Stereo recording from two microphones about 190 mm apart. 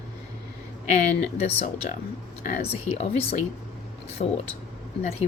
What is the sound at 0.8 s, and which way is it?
Speech, 40° left (ahead or behind).